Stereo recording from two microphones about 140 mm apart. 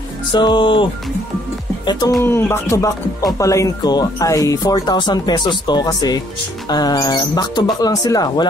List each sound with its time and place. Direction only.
0.3 s music: 35° left (ahead or behind)
1.9 s speech: 30° left (ahead or behind)
2.2 s speech: 15° left (ahead or behind)